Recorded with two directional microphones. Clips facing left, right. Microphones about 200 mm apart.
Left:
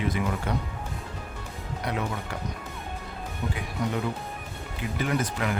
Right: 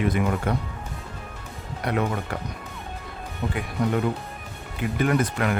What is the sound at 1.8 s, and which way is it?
Speech, 55° right (ahead or behind).